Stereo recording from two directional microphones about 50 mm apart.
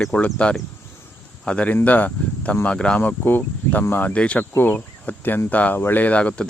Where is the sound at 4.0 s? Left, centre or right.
Left.